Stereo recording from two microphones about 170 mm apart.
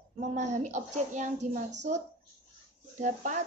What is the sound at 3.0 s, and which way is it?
Speech, 45° right (ahead or behind).